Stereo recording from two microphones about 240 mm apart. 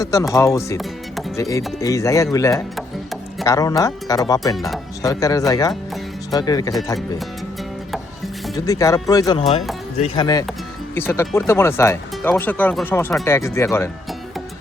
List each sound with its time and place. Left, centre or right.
0.0 s speech: centre
0.8 s music: centre
1.4 s speech: centre
2.7 s music: centre
3.4 s speech: centre
4.5 s speech: centre
5.0 s speech: centre
8.5 s speech: centre